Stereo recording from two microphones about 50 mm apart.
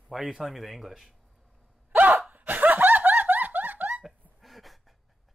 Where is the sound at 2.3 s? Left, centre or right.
Right.